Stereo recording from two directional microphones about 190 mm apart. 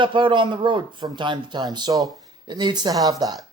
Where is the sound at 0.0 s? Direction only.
25° right (ahead or behind).